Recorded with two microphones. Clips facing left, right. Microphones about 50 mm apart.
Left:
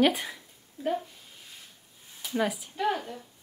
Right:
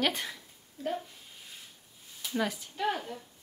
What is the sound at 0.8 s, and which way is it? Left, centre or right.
Speech, left.